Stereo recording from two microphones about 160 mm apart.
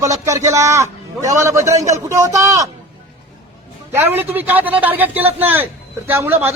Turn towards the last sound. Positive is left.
turn(degrees=-15)  # may be behind; listen again after turning